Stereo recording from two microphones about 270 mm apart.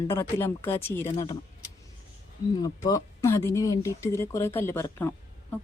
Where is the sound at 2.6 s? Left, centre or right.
Centre.